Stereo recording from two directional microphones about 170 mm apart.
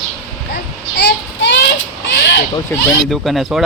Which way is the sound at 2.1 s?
85° left.